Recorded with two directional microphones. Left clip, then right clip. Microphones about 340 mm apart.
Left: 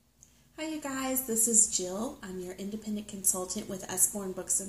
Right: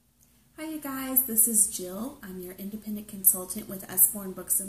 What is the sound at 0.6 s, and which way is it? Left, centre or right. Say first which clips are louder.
A woman's voice: even; centre.